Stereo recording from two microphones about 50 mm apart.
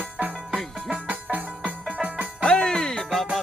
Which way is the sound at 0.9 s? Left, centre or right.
Right.